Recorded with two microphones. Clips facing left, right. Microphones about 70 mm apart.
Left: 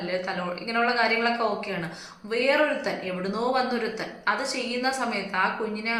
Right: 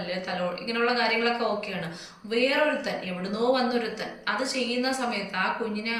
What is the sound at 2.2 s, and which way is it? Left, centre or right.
A woman's voice, left.